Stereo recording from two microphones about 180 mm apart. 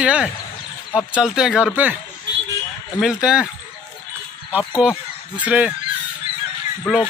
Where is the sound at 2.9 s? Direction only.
5° right (ahead or behind).